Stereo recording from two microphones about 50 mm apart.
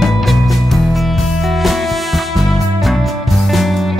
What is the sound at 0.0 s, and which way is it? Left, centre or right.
Music, centre.